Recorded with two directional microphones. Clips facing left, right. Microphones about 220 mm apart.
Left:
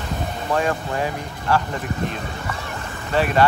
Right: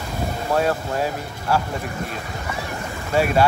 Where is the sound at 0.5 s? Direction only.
5° right (ahead or behind).